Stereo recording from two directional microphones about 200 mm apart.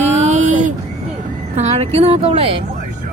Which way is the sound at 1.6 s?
35° right (ahead or behind).